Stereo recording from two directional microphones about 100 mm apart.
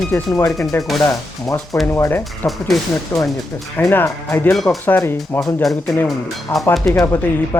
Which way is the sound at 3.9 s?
20° left (ahead or behind).